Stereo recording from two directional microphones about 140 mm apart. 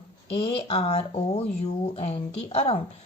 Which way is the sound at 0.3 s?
45° left (ahead or behind).